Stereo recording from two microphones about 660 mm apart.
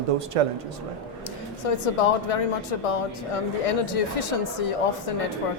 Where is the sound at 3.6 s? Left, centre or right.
Left.